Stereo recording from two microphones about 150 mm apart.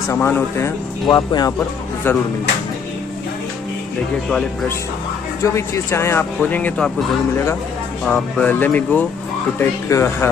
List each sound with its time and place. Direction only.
0.1 s speech: 15° left (ahead or behind)
1.0 s speech: 30° left (ahead or behind)
5.4 s speech: 20° left (ahead or behind)
8.0 s speech: 10° left (ahead or behind)